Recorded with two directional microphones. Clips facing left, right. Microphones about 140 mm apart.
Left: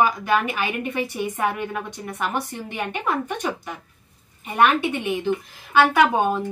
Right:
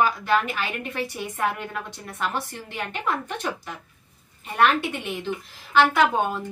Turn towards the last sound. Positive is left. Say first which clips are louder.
# left 3 dB
turn(degrees=15)  # may be behind; listen again after turning